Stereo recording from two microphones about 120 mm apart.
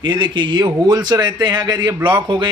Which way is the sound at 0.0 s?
40° right (ahead or behind).